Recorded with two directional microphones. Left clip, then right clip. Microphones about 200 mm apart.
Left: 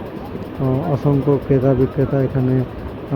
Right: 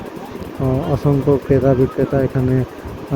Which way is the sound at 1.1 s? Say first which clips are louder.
Right 2 dB; 15° right (ahead or behind).